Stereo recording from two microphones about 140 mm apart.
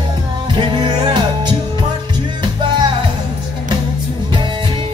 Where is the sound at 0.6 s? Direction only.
30° right (ahead or behind).